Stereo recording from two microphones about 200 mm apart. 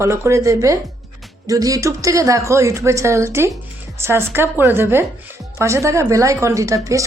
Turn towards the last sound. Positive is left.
turn(degrees=-15)  # may be behind; listen again after turning